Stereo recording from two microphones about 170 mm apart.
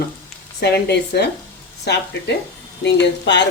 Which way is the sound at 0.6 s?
75° left (ahead or behind).